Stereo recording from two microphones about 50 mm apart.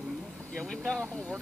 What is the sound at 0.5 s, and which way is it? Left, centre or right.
Vehicle, left.